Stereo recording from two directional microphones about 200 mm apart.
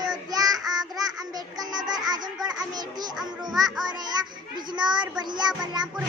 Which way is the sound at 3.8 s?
20° right (ahead or behind).